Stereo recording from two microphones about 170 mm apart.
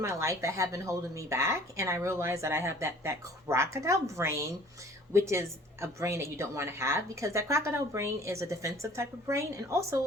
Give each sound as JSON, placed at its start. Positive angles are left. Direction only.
{"t": 0.0, "sound": "speech", "side_deg": -15}